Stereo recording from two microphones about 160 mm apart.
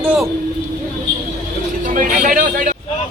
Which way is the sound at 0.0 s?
10° right (ahead or behind).